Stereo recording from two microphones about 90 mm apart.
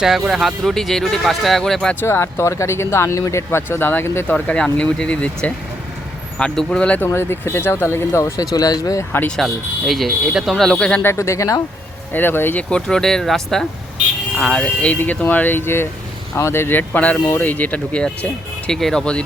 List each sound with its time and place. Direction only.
0.3 s speech: 5° right (ahead or behind)
2.0 s speech: 30° left (ahead or behind)
4.3 s speech: 15° left (ahead or behind); by 9.0 s 40° left (ahead or behind)
9.3 s speech: centre (ahead or behind)
11.0 s speech: 30° left (ahead or behind)
12.1 s speech: 25° left (ahead or behind)
12.7 s speech: 5° left (ahead or behind)